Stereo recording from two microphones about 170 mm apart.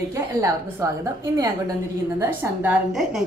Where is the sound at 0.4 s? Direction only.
20° right (ahead or behind); by 3.2 s centre (ahead or behind).